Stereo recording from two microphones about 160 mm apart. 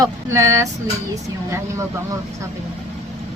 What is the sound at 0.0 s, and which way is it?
Speech, 20° right (ahead or behind).